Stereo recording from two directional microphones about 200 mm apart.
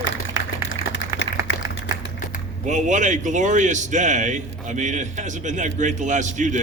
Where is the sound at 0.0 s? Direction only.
65° left (ahead or behind).